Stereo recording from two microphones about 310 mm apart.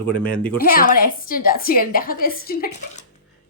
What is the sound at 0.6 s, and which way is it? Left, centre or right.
A woman's voice, left.